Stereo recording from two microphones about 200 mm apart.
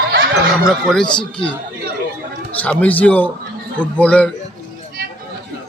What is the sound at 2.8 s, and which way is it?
Speech, 5° left (ahead or behind).